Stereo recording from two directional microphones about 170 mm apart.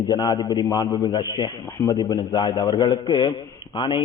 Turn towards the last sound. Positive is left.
turn(degrees=30)  # may be behind; listen again after turning